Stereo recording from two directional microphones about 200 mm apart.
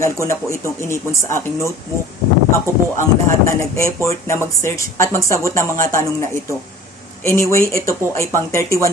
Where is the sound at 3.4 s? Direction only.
15° left (ahead or behind).